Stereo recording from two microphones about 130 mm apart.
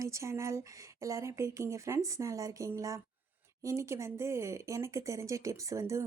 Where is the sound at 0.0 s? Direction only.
25° right (ahead or behind).